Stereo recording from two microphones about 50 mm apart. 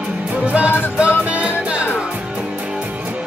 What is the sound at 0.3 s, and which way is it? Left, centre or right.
Music, right.